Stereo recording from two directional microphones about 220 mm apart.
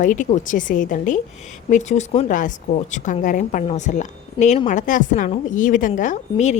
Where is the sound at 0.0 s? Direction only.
35° left (ahead or behind).